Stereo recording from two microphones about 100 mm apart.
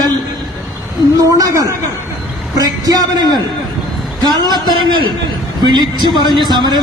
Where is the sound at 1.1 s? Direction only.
35° right (ahead or behind).